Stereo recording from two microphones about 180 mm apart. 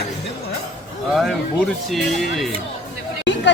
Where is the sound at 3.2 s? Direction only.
80° left.